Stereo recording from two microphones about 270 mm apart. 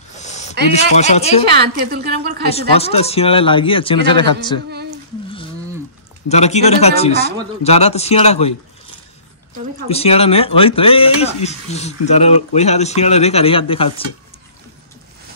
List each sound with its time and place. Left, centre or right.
0.1 s a sound: left
0.7 s speech: left
1.5 s a woman's voice: right
2.5 s speech: left
6.2 s speech: left
9.8 s speech: left